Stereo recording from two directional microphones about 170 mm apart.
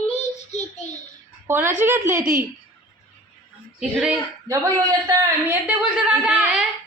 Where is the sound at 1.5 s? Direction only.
15° right (ahead or behind).